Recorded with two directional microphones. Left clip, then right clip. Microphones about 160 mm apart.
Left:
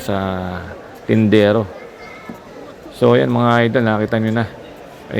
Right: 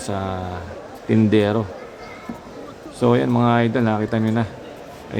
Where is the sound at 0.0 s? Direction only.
20° left (ahead or behind).